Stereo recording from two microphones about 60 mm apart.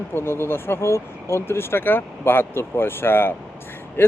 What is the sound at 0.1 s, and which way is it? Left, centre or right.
Speech, left.